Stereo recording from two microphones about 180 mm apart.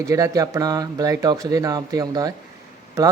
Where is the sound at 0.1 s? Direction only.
20° right (ahead or behind).